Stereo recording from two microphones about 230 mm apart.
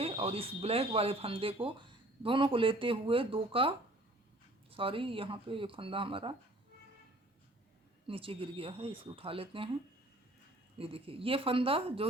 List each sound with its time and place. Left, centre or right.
0.0 s speech: right
8.0 s speech: right
10.8 s speech: right